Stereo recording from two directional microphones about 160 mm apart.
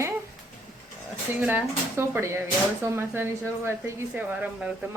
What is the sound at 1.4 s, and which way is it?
A woman's voice, 10° right (ahead or behind).